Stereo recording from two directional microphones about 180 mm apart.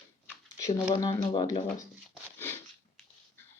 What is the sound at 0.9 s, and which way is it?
Speech, 25° left (ahead or behind).